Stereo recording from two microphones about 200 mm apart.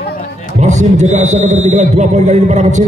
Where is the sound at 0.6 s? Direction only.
35° right (ahead or behind).